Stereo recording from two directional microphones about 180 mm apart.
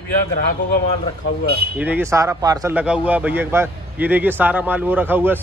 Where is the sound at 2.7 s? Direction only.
5° right (ahead or behind).